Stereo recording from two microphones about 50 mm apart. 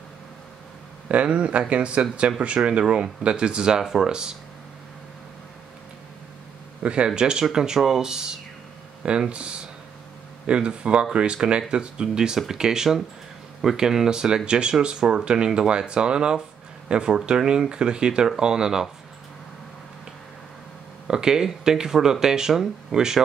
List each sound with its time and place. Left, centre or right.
1.0 s speech: right
6.8 s speech: right
10.4 s speech: centre
21.1 s speech: centre
22.5 s speech: centre
22.9 s speech: centre